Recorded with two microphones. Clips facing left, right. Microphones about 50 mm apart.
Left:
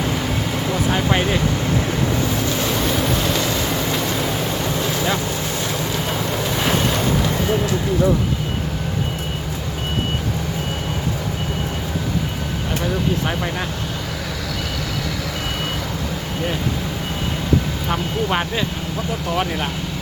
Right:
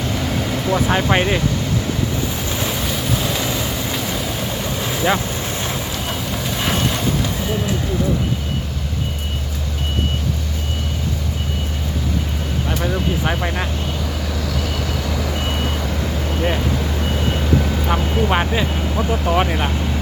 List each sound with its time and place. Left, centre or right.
0.2 s vehicle: centre
0.9 s speech: centre
2.6 s vehicle: centre
6.6 s vehicle: centre
12.8 s speech: centre
17.8 s speech: centre
18.9 s speech: right